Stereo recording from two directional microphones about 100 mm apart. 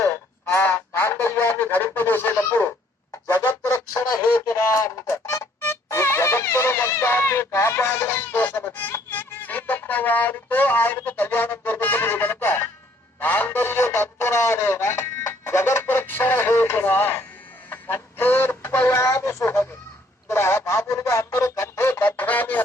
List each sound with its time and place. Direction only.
0.0 s honk: 25° left (ahead or behind)
3.4 s music: 20° left (ahead or behind)
4.4 s music: 30° left (ahead or behind)
13.1 s a sound: 20° left (ahead or behind)
20.2 s speech: 25° left (ahead or behind)